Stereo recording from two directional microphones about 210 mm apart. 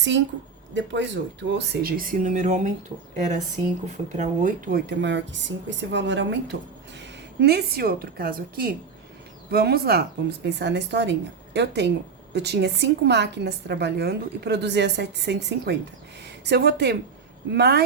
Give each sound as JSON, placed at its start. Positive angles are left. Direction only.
{"t": 0.7, "sound": "a woman's voice", "side_deg": -60}
{"t": 3.8, "sound": "a woman's voice", "side_deg": -35}